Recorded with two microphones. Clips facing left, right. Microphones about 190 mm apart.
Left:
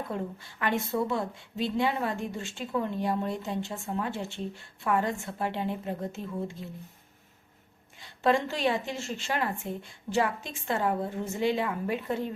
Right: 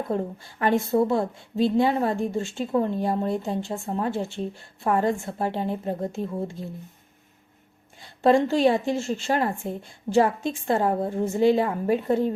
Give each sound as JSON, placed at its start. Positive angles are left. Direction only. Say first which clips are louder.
{"t": 0.6, "sound": "a woman's voice", "louder": "right 7 dB", "side_deg": -35}
{"t": 8.2, "sound": "a woman's voice", "louder": "right 7 dB", "side_deg": -35}